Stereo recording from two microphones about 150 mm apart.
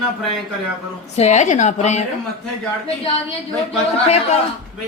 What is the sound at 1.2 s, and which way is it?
Speech, 50° left (ahead or behind).